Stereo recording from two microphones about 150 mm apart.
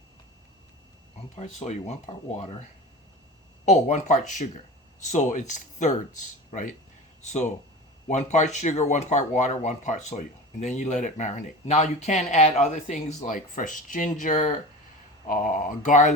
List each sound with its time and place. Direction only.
1.4 s speech: 45° left (ahead or behind)
3.7 s speech: 50° left (ahead or behind)